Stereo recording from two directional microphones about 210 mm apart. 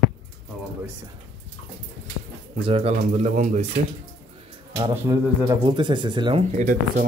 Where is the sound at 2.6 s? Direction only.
30° right (ahead or behind).